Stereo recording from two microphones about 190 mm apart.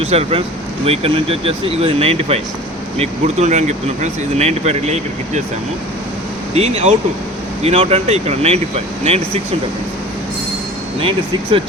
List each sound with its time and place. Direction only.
0.0 s speech: 30° right (ahead or behind)
6.5 s speech: 35° right (ahead or behind)